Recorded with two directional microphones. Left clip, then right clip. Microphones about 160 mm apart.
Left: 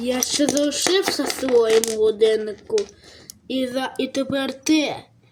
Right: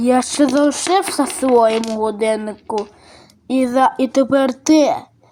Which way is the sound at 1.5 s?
30° right (ahead or behind).